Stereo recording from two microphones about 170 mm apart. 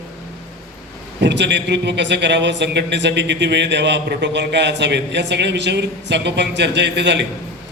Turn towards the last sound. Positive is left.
turn(degrees=-90)